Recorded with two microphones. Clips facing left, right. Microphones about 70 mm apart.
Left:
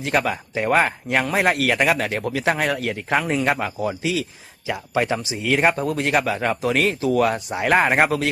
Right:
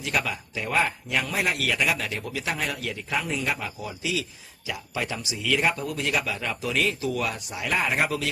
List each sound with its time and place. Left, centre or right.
0.0 s speech: left